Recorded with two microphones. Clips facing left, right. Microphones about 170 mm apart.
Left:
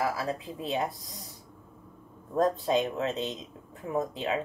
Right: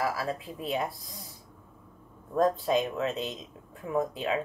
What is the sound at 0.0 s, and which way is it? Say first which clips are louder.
Speech: even; 20° left (ahead or behind).